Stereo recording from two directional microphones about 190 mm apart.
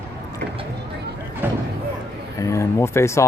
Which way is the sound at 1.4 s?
10° right (ahead or behind).